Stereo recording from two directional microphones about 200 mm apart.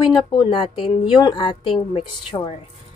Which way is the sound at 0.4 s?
25° left (ahead or behind).